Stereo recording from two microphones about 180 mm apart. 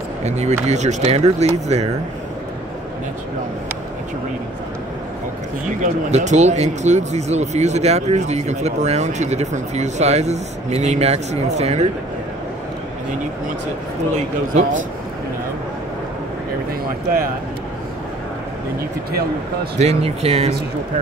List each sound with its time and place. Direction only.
0.2 s speech: 35° right (ahead or behind)
5.8 s speech: 40° right (ahead or behind)
14.5 s speech: 45° right (ahead or behind)
19.8 s speech: 35° right (ahead or behind)